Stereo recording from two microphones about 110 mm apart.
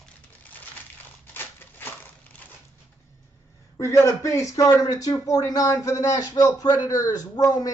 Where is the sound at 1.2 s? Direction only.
20° left (ahead or behind).